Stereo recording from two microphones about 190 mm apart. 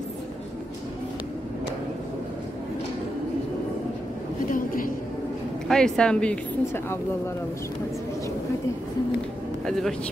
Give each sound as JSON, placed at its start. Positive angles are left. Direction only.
{"t": 4.5, "sound": "a sound", "side_deg": 45}
{"t": 5.7, "sound": "a woman's voice", "side_deg": 5}
{"t": 9.7, "sound": "a woman's voice", "side_deg": 0}